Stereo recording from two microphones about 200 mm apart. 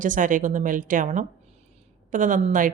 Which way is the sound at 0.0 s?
40° right (ahead or behind).